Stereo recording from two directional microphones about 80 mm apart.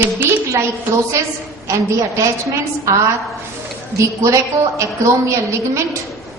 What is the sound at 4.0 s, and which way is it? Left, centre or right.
A woman's voice, right.